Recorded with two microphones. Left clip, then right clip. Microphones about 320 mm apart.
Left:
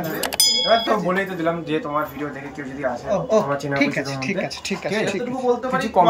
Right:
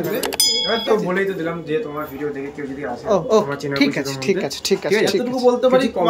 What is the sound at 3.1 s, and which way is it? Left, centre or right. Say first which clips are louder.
Speech: right 3 dB; centre.